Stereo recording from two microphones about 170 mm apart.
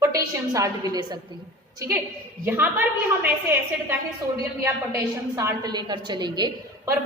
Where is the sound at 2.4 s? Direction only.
10° right (ahead or behind).